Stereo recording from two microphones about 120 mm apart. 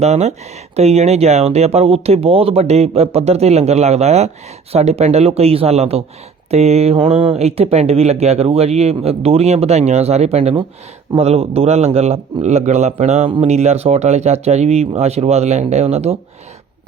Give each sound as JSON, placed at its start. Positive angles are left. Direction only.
{"t": 0.0, "sound": "speech", "side_deg": -65}
{"t": 7.0, "sound": "mantra", "side_deg": -45}
{"t": 7.3, "sound": "speech", "side_deg": -60}